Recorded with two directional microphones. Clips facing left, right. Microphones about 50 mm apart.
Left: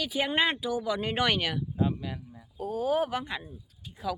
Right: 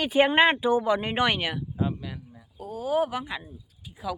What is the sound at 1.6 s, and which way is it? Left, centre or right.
Speech, centre.